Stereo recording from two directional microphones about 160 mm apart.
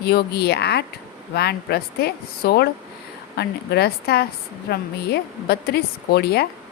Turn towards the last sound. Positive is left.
turn(degrees=90)